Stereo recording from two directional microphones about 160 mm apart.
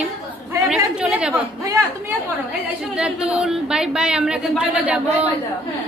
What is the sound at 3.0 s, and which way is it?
A woman's voice, 5° right (ahead or behind).